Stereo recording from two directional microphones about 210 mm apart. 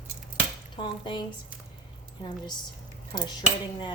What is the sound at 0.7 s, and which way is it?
Speech, 20° left (ahead or behind).